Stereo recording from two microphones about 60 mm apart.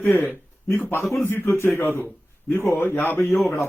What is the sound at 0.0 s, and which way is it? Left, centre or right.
A man's voice, left.